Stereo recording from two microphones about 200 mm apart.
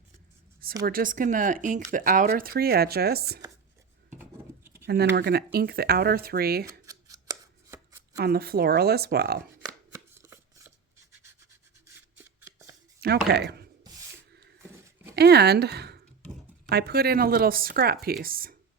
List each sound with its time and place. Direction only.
0.9 s speech: 45° right (ahead or behind)
4.6 s a sound: 10° right (ahead or behind)
4.9 s speech: 50° right (ahead or behind)
6.7 s shuffling cards: 15° right (ahead or behind)
8.1 s speech: 50° right (ahead or behind)
9.9 s chopping: 15° right (ahead or behind)
11.9 s a sound: 10° right (ahead or behind)
13.0 s speech: 55° right (ahead or behind)
15.1 s speech: 55° right (ahead or behind)